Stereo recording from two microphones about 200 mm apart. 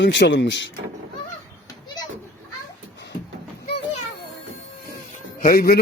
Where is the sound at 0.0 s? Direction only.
65° left (ahead or behind).